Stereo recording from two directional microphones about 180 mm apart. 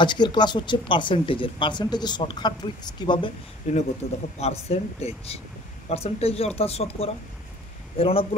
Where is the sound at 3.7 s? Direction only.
40° left (ahead or behind).